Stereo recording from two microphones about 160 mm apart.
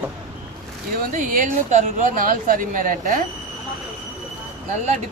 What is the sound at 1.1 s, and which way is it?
Speech, 55° right (ahead or behind).